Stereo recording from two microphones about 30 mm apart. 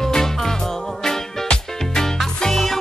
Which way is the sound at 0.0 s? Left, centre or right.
Centre.